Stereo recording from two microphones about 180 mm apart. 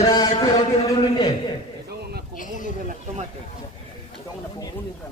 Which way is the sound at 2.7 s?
50° right (ahead or behind).